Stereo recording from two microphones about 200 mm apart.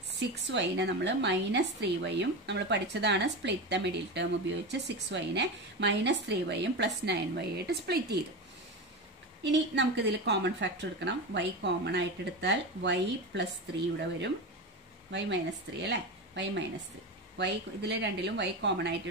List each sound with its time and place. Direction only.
0.2 s speech: 60° right (ahead or behind)
9.4 s speech: 60° right (ahead or behind)